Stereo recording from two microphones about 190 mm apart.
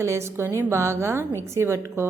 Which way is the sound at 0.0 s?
15° right (ahead or behind).